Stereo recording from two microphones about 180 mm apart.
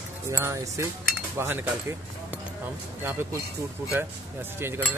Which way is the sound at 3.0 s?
10° right (ahead or behind).